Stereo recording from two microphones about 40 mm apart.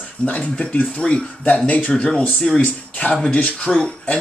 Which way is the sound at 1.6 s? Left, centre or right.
Left.